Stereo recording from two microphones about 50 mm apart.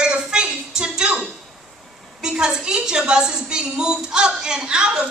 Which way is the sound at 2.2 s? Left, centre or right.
Centre.